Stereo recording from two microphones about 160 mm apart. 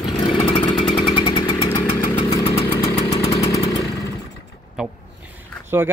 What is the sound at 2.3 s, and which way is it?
Engine, 25° left (ahead or behind).